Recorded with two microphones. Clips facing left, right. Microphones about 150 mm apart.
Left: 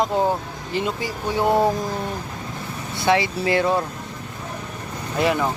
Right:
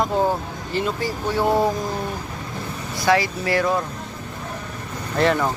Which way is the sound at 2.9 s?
20° left (ahead or behind).